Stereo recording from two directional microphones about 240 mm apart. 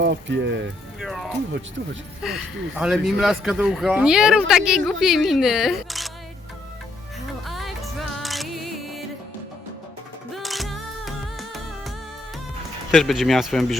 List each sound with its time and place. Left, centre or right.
0.0 s speech: right
0.9 s speech: centre
7.4 s music: centre
10.3 s music: centre
12.9 s speech: centre